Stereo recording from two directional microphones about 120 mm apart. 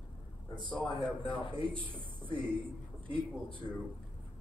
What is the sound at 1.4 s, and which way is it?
A man's voice, 45° right (ahead or behind).